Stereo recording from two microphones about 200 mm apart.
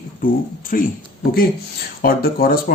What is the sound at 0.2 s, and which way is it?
Speech, 45° left (ahead or behind).